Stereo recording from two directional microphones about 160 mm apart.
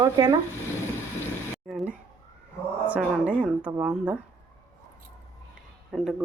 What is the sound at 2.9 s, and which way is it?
A woman's voice, 10° right (ahead or behind).